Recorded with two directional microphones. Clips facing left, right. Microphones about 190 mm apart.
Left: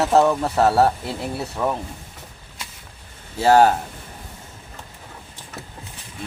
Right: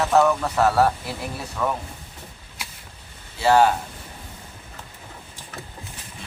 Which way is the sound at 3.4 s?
45° left (ahead or behind).